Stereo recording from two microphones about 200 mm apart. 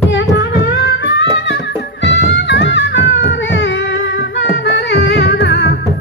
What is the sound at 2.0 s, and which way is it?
Music, 60° left (ahead or behind).